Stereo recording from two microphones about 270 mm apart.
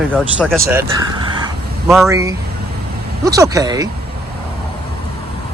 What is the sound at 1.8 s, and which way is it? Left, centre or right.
Speech, centre.